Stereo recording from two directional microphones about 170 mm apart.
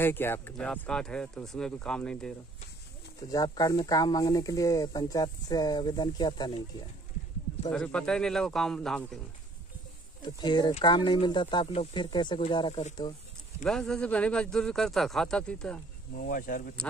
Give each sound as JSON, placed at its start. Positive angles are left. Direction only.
{"t": 0.0, "sound": "speech", "side_deg": 15}
{"t": 3.3, "sound": "speech", "side_deg": 25}
{"t": 7.7, "sound": "speech", "side_deg": 5}
{"t": 10.2, "sound": "speech", "side_deg": 25}
{"t": 13.6, "sound": "speech", "side_deg": 5}
{"t": 16.2, "sound": "speech", "side_deg": 55}